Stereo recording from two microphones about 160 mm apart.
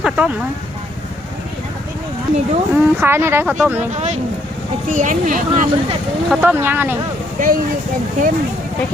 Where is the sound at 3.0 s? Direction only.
15° right (ahead or behind).